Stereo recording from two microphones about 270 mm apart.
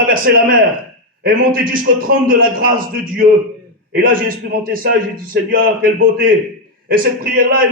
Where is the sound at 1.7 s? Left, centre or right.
Right.